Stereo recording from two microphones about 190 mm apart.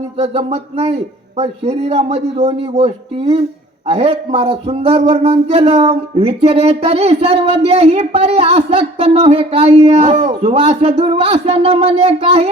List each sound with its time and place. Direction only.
0.2 s a man's voice: 35° right (ahead or behind)